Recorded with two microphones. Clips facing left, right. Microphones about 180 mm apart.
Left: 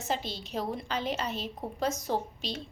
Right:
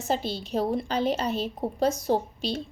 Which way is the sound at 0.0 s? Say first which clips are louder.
Right 5 dB; 35° right (ahead or behind).